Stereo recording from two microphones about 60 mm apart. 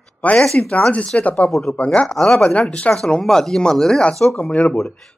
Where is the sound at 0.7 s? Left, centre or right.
Centre.